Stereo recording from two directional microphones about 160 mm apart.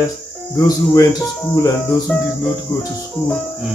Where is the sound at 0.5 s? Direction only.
20° left (ahead or behind).